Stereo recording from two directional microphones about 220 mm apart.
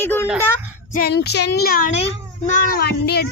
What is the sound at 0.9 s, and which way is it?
Child singing, 45° left (ahead or behind).